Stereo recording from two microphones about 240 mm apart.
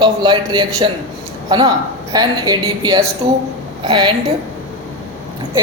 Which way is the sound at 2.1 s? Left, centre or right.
Centre.